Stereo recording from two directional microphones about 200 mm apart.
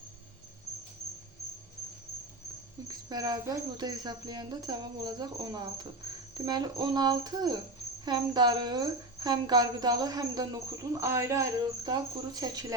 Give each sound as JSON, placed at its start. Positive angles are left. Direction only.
{"t": 2.8, "sound": "speech", "side_deg": -20}